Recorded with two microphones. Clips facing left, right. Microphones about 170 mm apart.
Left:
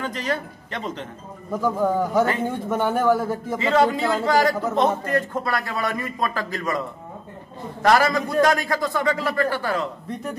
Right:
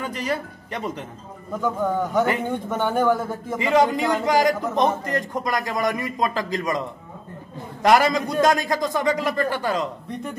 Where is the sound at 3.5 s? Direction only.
15° right (ahead or behind).